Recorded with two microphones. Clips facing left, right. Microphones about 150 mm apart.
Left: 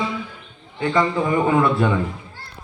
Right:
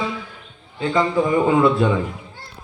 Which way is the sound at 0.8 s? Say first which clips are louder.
Right 1 dB; 15° right (ahead or behind).